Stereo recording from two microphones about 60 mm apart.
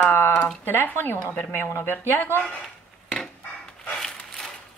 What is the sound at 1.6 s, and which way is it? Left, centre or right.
Speech, left.